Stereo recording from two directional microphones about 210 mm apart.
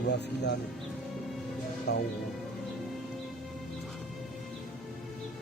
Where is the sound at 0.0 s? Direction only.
55° left (ahead or behind).